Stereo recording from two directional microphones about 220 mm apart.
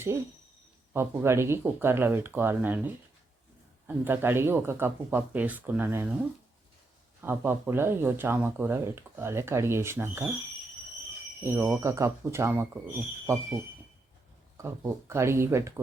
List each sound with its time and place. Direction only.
0.9 s speech: 10° right (ahead or behind)
7.2 s speech: 10° right (ahead or behind)
11.4 s speech: 10° right (ahead or behind)
14.6 s speech: 10° right (ahead or behind)